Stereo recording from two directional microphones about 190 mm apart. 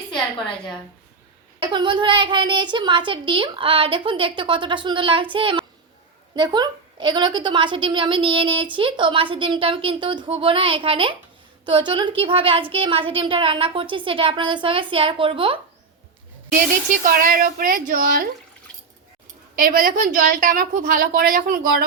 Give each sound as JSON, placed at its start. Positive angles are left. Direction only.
{"t": 1.5, "sound": "a woman's voice", "side_deg": -25}
{"t": 17.0, "sound": "a woman's voice", "side_deg": -45}
{"t": 19.5, "sound": "a woman's voice", "side_deg": -45}